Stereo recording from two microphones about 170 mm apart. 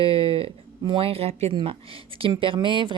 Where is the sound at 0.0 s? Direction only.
35° right (ahead or behind).